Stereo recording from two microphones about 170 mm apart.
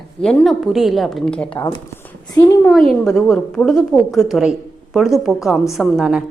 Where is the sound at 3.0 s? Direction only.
Centre (ahead or behind).